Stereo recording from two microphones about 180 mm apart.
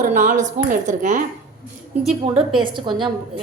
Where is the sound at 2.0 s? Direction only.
30° right (ahead or behind).